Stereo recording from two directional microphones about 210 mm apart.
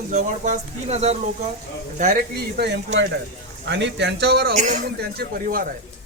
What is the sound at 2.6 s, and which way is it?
Speech, 55° right (ahead or behind).